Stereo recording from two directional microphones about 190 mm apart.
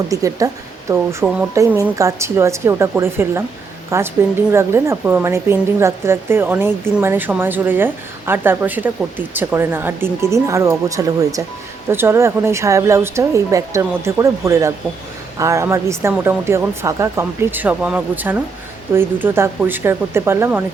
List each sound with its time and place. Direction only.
0.1 s speech: 15° right (ahead or behind)